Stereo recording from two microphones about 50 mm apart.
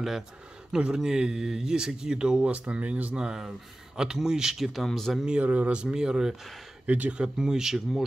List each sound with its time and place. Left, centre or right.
0.7 s speech: centre
3.3 s speech: centre
4.8 s speech: centre
5.4 s speech: right
5.8 s speech: centre
6.9 s speech: right
7.3 s speech: centre